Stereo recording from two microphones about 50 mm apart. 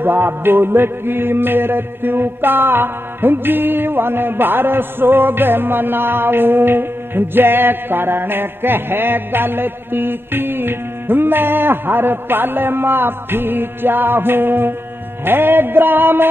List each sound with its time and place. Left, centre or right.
0.0 s music: right